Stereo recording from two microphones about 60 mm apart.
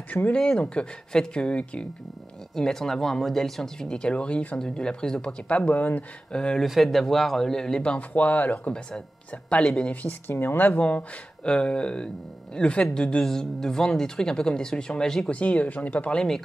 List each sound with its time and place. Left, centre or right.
0.3 s speech: centre
2.5 s speech: centre; by 6.0 s left
6.3 s speech: centre
6.6 s a man's voice: centre
8.1 s speech: left
9.6 s speech: centre
10.0 s speech: left
10.8 s speech: left
15.3 s speech: left